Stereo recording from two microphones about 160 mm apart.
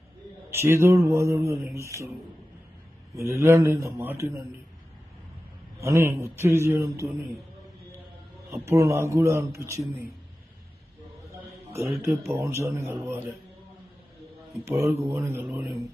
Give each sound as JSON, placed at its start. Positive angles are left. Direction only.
{"t": 0.5, "sound": "speech", "side_deg": -15}
{"t": 3.2, "sound": "speech", "side_deg": -15}
{"t": 5.8, "sound": "speech", "side_deg": -15}
{"t": 8.5, "sound": "speech", "side_deg": -15}
{"t": 11.3, "sound": "a sound", "side_deg": -20}
{"t": 12.3, "sound": "speech", "side_deg": -15}
{"t": 14.7, "sound": "speech", "side_deg": -20}